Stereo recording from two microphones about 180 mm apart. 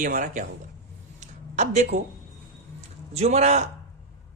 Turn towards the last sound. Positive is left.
turn(degrees=-35)  # may be behind; listen again after turning